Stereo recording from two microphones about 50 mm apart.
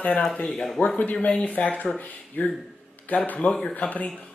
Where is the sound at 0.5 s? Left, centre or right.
Centre.